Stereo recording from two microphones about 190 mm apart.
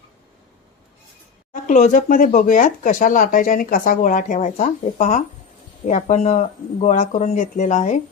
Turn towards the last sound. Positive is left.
turn(degrees=40)  # may be behind; listen again after turning